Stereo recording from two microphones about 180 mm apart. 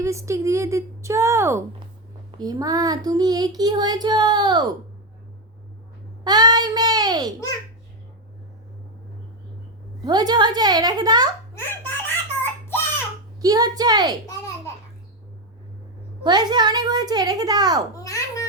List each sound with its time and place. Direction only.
0.0 s a sound: 15° right (ahead or behind)
2.4 s child singing: 20° right (ahead or behind)
6.2 s a sound: 25° right (ahead or behind)
10.0 s child singing: 20° right (ahead or behind)
11.5 s belly laugh: 10° left (ahead or behind)
13.4 s child singing: 20° right (ahead or behind)
16.2 s child singing: 25° right (ahead or behind)
17.9 s babbling: 20° left (ahead or behind)